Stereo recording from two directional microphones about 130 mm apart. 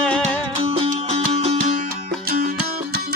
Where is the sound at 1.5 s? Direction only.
65° right (ahead or behind).